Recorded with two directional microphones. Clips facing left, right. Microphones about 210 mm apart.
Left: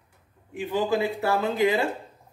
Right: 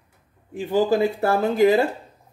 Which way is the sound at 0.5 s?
40° right (ahead or behind).